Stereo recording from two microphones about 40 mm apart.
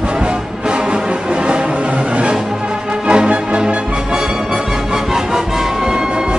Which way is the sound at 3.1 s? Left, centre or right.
Right.